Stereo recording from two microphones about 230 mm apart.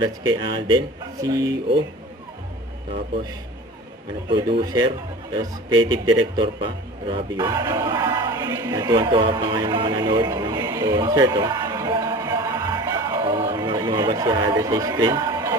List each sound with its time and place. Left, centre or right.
0.0 s speech: centre
4.3 s speech: right
7.3 s music: centre